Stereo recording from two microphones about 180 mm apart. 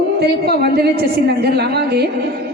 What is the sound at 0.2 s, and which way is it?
A woman's voice, 60° right (ahead or behind).